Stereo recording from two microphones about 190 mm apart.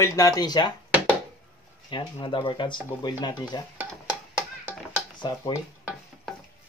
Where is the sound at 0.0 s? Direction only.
15° left (ahead or behind).